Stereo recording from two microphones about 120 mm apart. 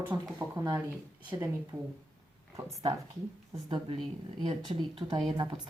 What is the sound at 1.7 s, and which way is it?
Speech, 10° right (ahead or behind).